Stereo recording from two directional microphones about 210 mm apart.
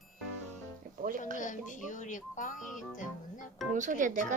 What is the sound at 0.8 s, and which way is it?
Music, 45° right (ahead or behind).